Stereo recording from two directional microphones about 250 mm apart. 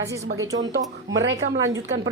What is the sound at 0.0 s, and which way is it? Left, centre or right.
Speech, centre.